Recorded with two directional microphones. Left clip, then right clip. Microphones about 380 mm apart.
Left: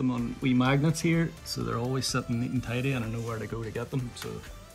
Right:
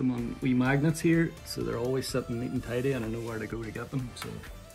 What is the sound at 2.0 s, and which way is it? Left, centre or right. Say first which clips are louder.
Speech: left 1 dB; left.